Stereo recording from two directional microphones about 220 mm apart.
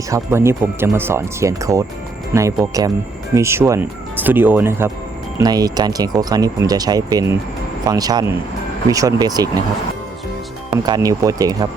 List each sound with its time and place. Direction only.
0.1 s speech: 10° right (ahead or behind)
10.8 s speech: 15° right (ahead or behind)